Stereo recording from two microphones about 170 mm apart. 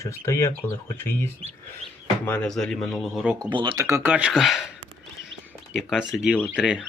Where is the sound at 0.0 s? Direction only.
15° left (ahead or behind); by 3.3 s centre (ahead or behind).